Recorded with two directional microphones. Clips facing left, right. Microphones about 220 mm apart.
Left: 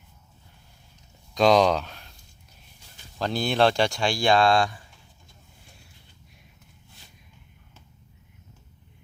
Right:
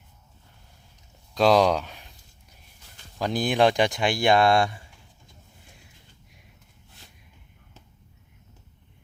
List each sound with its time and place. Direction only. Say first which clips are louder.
1.3 s speech: even; 5° right (ahead or behind)
3.2 s speech: right 1 dB; 15° right (ahead or behind)